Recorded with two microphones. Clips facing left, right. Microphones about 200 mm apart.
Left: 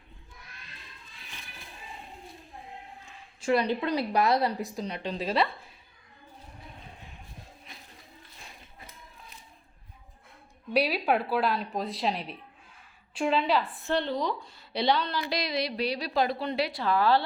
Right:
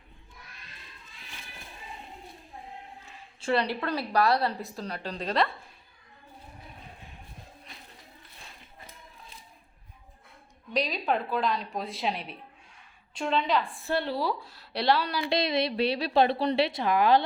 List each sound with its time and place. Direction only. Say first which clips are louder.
3.4 s a woman's voice: left 2 dB; 10° left (ahead or behind)
5.1 s a woman's voice: even; 5° left (ahead or behind)
10.8 s a woman's voice: left 3 dB; 10° left (ahead or behind)
15.3 s a woman's voice: right 7 dB; 25° right (ahead or behind)